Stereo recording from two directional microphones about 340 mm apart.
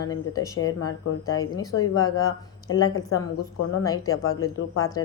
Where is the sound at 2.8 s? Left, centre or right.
Left.